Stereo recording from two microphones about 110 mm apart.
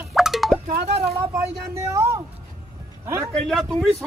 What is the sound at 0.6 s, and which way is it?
Speech, 70° right (ahead or behind).